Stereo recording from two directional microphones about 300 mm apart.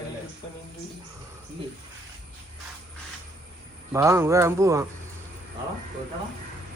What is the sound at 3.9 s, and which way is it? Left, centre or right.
Speech, centre.